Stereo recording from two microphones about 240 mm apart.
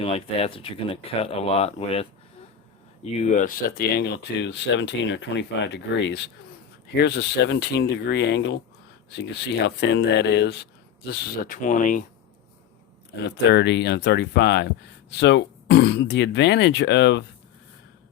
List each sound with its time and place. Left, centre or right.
0.0 s speech: left
13.5 s speech: left